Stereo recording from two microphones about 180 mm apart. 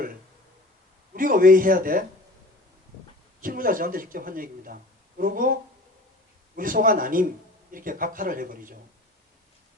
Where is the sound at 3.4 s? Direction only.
50° right (ahead or behind).